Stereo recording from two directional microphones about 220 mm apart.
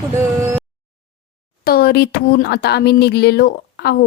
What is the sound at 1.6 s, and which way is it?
Speech, 45° left (ahead or behind).